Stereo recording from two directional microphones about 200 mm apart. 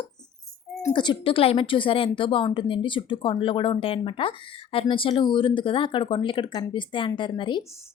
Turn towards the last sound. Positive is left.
turn(degrees=25)  # may be behind; listen again after turning